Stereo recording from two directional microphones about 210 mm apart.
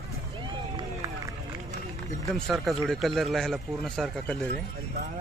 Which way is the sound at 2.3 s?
Centre (ahead or behind).